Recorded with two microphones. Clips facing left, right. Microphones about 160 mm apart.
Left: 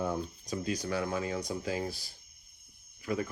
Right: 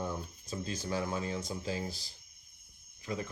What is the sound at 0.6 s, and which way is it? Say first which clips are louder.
Speech: left 2 dB; 30° right (ahead or behind).